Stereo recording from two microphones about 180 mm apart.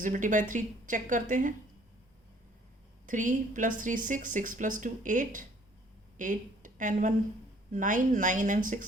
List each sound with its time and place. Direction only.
0.0 s speech: 45° right (ahead or behind)
3.1 s a woman's voice: 45° right (ahead or behind)